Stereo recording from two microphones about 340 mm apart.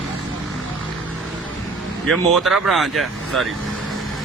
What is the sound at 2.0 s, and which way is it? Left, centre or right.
Speech, centre.